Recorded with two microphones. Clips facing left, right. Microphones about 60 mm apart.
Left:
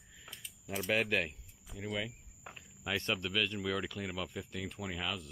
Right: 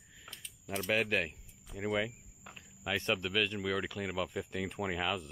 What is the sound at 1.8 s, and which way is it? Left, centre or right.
Speech, centre.